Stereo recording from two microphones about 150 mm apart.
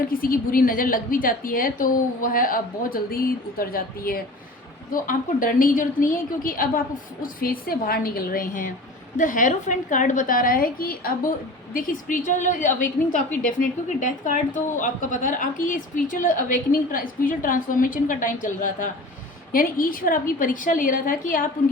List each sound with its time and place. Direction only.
0.2 s a woman's voice: 70° left (ahead or behind)
19.5 s a woman's voice: 70° left (ahead or behind)